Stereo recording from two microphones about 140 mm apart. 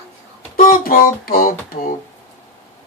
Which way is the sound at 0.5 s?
90° left.